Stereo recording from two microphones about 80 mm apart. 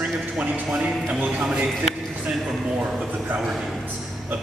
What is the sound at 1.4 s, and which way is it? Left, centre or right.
Speech, centre.